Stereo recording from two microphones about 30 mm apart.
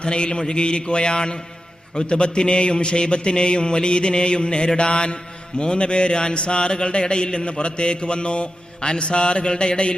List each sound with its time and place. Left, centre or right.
0.0 s a man's voice: left